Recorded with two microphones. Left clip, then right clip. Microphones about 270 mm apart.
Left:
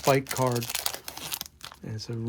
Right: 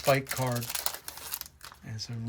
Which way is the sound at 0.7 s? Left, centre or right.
Left.